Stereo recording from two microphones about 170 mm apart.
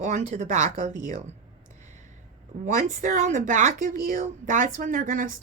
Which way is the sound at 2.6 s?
50° right (ahead or behind).